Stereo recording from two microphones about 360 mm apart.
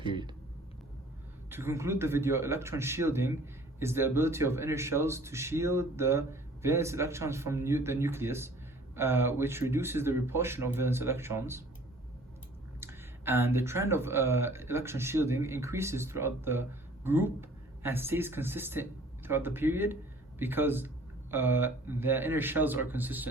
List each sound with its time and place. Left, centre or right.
0.0 s a sound: centre
1.5 s speech: centre
12.8 s speech: centre